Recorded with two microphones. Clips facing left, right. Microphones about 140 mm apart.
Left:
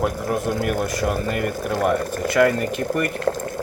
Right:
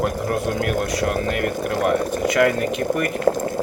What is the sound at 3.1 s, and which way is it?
Boiling, 15° right (ahead or behind).